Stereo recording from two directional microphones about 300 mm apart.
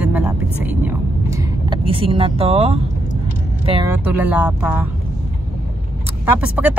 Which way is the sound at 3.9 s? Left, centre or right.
Centre.